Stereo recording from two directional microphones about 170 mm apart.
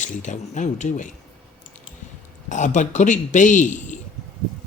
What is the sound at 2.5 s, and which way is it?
Speech, 45° left (ahead or behind).